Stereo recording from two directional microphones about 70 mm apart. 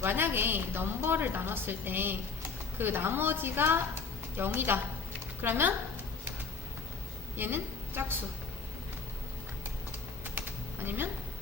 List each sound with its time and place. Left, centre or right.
0.0 s a woman's voice: right
7.3 s a woman's voice: right
10.2 s typing: right